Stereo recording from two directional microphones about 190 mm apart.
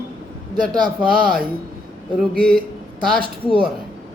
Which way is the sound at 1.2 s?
50° right (ahead or behind).